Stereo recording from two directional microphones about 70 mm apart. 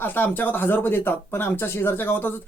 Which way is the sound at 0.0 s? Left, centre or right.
Left.